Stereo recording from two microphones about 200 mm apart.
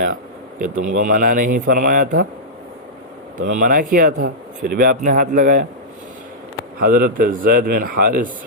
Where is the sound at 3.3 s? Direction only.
45° right (ahead or behind).